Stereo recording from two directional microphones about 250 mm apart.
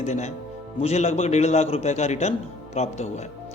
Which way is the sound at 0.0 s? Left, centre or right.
Left.